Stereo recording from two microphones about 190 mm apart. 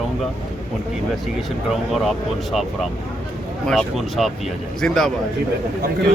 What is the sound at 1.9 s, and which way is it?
Speech, centre (ahead or behind).